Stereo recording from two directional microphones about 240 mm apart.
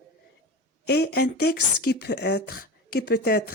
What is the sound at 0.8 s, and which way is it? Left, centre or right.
Speech, left.